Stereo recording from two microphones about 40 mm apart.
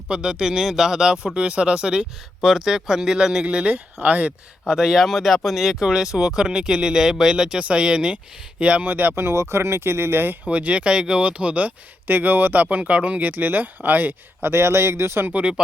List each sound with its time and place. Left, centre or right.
0.1 s speech: centre
3.4 s speech: right
4.7 s speech: centre
5.6 s speech: centre
8.8 s speech: right
9.1 s speech: right
10.5 s speech: right
11.2 s speech: right
12.0 s speech: right
12.8 s speech: right
13.3 s speech: right
14.4 s speech: right
15.3 s speech: right